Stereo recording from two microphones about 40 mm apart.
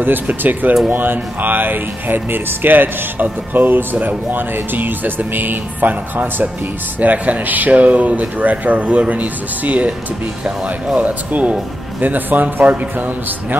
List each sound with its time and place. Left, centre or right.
0.0 s speech: right
11.0 s speech: right